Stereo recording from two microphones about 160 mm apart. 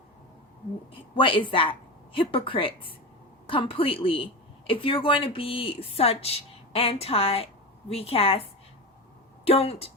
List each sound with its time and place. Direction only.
1.1 s a woman's voice: 30° left (ahead or behind)